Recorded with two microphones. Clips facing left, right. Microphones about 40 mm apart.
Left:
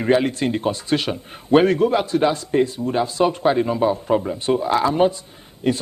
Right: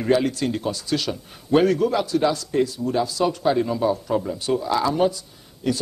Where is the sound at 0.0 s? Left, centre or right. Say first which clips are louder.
Left 2 dB; left.